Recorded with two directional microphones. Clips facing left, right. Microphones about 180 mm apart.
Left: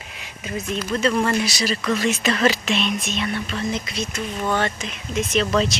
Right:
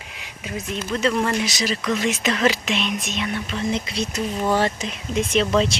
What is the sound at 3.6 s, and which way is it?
Speech, 25° right (ahead or behind).